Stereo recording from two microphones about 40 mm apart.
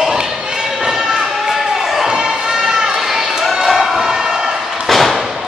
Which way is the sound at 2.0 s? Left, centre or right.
Centre.